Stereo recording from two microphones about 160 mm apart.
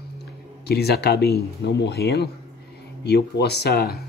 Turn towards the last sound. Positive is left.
turn(degrees=80)